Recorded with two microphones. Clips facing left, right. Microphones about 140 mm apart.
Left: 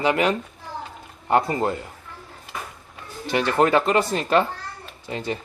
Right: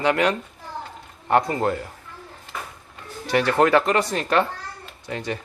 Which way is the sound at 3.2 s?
Centre (ahead or behind).